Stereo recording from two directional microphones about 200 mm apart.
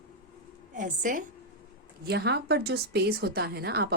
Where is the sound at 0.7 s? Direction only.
40° right (ahead or behind).